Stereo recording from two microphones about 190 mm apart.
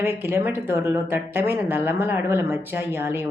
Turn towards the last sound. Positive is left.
turn(degrees=-10)  # may be behind; listen again after turning